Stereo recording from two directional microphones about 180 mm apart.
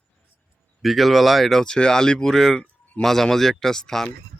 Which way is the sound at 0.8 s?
Centre (ahead or behind).